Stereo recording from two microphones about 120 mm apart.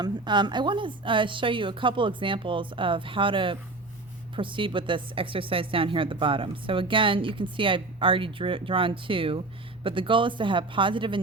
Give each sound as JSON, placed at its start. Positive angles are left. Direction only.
{"t": 0.0, "sound": "speech", "side_deg": -40}